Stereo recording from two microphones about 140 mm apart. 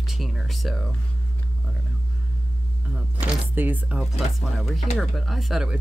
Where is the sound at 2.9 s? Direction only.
15° right (ahead or behind).